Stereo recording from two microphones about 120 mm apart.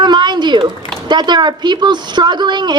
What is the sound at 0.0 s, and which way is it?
A woman's voice, 40° right (ahead or behind).